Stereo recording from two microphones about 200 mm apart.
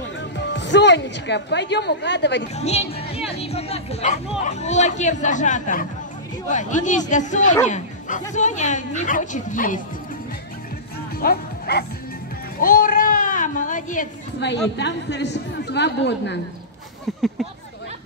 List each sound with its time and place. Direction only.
0.2 s a woman's voice: 65° left (ahead or behind)
2.5 s speech: 35° left (ahead or behind)
3.3 s music: 30° left (ahead or behind)
4.4 s speech: 35° left (ahead or behind)
11.1 s bow-wow: 50° left (ahead or behind)
12.5 s a sound: 45° left (ahead or behind)
14.4 s a woman's voice: 60° left (ahead or behind)